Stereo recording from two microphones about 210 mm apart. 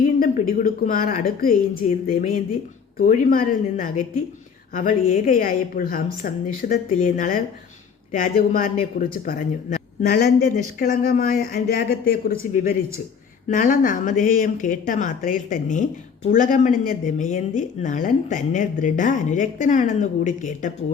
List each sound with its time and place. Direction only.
0.0 s speech: 40° left (ahead or behind)